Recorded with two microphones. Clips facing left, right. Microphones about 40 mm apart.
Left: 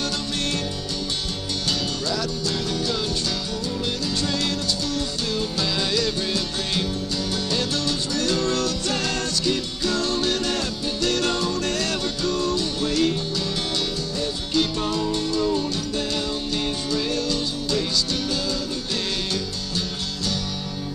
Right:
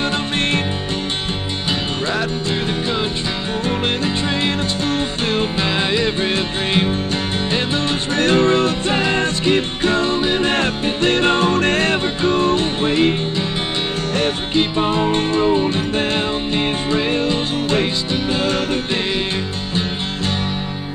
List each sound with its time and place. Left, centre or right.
5.3 s music: right
8.1 s music: right
10.5 s music: right
14.5 s music: right